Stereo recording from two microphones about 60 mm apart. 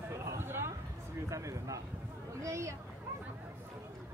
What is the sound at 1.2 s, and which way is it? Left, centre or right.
A man's voice, right.